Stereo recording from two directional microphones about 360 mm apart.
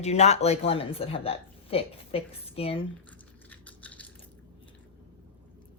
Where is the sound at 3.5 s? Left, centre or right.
Centre.